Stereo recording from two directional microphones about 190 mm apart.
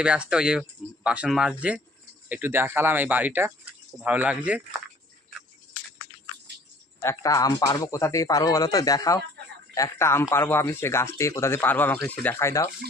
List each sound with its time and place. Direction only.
0.0 s speech: 5° right (ahead or behind)
7.0 s speech: 15° left (ahead or behind)